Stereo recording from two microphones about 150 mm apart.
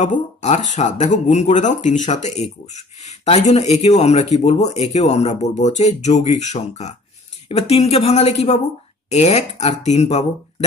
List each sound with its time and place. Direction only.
0.0 s speech: 50° left (ahead or behind)